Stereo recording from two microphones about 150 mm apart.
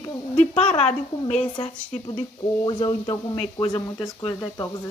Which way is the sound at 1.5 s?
30° left (ahead or behind).